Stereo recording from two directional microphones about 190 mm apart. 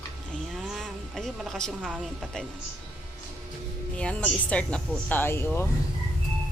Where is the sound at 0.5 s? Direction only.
Centre (ahead or behind).